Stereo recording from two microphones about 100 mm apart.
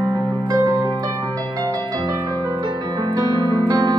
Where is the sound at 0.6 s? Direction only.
45° right (ahead or behind).